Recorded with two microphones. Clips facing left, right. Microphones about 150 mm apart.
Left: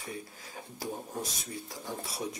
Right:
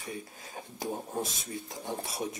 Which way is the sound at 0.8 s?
25° right (ahead or behind).